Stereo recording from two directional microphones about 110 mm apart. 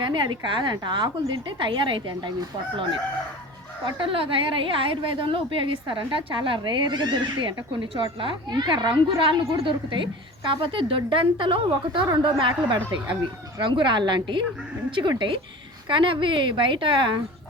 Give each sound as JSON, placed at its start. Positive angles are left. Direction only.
{"t": 0.0, "sound": "a woman's voice", "side_deg": -45}
{"t": 3.8, "sound": "a woman's voice", "side_deg": -50}